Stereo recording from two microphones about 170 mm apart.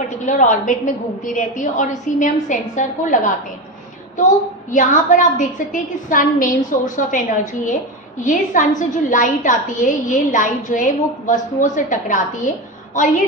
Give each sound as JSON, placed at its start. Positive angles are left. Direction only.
{"t": 0.2, "sound": "a woman's voice", "side_deg": 45}
{"t": 4.6, "sound": "a woman's voice", "side_deg": 50}